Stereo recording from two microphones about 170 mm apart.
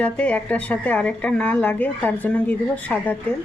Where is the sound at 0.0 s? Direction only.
10° left (ahead or behind).